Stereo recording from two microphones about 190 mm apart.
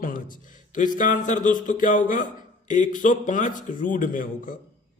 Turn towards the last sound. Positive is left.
turn(degrees=45)  # may be behind; listen again after turning